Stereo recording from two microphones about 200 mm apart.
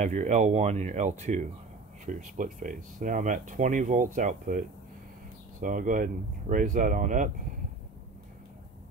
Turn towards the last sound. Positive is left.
turn(degrees=-40)  # may be behind; listen again after turning